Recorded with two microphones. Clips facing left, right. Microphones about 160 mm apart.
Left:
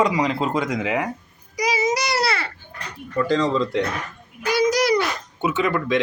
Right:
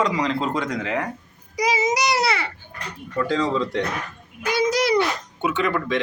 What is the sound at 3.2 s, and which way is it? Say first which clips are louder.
Speech: left 2 dB; centre (ahead or behind).